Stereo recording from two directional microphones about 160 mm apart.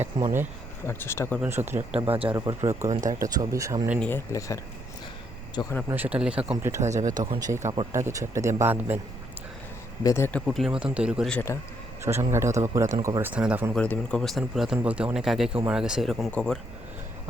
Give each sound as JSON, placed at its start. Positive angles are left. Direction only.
{"t": 0.1, "sound": "speech", "side_deg": -30}
{"t": 0.9, "sound": "speech", "side_deg": 15}
{"t": 1.4, "sound": "speech", "side_deg": -15}
{"t": 2.0, "sound": "speech", "side_deg": -35}
{"t": 2.3, "sound": "speech", "side_deg": -20}
{"t": 4.0, "sound": "speech", "side_deg": 15}
{"t": 5.9, "sound": "speech", "side_deg": -10}
{"t": 10.0, "sound": "speech", "side_deg": 20}
{"t": 10.4, "sound": "speech", "side_deg": 0}
{"t": 11.3, "sound": "speech", "side_deg": 10}
{"t": 12.3, "sound": "speech", "side_deg": -15}
{"t": 13.3, "sound": "speech", "side_deg": -10}
{"t": 13.7, "sound": "speech", "side_deg": 10}